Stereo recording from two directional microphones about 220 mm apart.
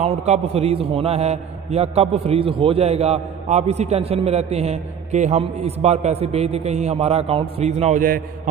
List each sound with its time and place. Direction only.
0.0 s a man's voice: 30° right (ahead or behind)